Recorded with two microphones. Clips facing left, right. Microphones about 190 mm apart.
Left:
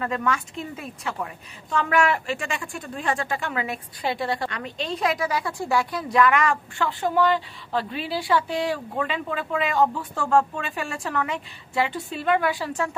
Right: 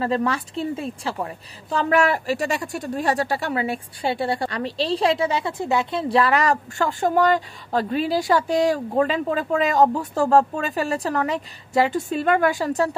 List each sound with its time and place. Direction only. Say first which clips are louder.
0.0 s a woman's voice: right 4 dB; 30° right (ahead or behind)